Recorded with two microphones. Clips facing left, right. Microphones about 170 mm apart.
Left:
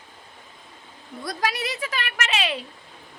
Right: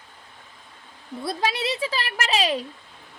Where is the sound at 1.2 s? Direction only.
25° right (ahead or behind).